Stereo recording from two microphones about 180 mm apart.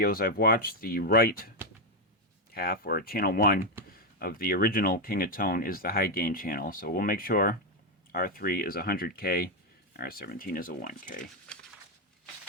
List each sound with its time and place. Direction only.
0.0 s speech: 55° left (ahead or behind)
2.5 s speech: 60° left (ahead or behind)